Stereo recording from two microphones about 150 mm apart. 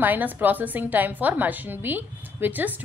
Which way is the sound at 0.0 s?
10° right (ahead or behind).